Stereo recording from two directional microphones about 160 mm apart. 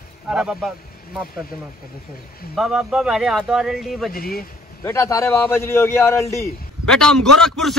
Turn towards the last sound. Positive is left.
turn(degrees=5)  # may be behind; listen again after turning